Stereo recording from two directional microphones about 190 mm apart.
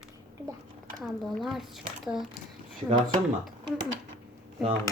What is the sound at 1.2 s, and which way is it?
Speech, centre (ahead or behind).